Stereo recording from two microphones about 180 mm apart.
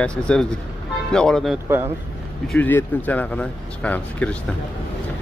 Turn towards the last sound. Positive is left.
turn(degrees=5)  # may be behind; listen again after turning